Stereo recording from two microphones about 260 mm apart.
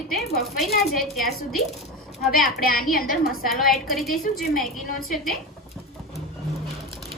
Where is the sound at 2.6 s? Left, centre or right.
Left.